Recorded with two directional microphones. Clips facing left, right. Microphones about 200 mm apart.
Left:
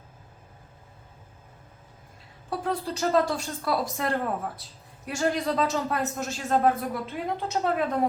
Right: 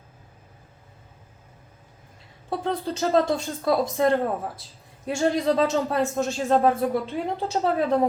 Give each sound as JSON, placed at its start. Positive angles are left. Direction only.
{"t": 2.5, "sound": "speech", "side_deg": -25}